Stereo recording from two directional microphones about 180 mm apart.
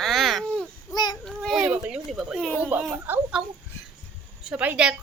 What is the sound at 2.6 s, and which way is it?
Speech, 10° right (ahead or behind).